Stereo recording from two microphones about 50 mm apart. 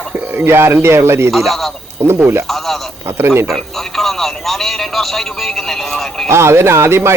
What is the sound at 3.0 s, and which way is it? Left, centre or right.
Speech, right.